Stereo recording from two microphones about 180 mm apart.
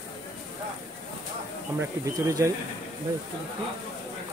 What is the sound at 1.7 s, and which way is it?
Speech, 15° right (ahead or behind).